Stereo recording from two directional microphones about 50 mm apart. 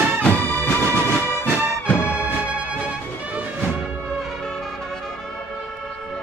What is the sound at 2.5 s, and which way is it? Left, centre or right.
Music, right.